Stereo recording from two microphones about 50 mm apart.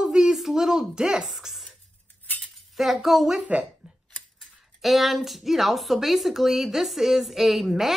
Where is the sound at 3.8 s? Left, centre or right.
Centre.